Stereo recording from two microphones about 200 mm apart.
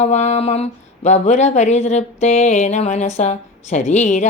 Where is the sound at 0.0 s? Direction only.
35° left (ahead or behind).